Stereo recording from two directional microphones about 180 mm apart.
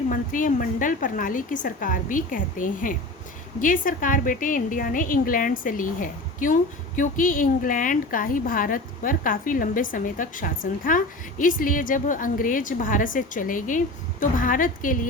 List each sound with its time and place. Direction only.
0.1 s a woman's voice: 50° left (ahead or behind)